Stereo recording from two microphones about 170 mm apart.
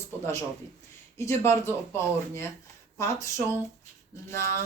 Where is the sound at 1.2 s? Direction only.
15° left (ahead or behind).